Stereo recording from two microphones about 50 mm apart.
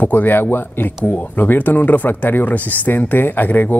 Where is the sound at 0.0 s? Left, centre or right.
Left.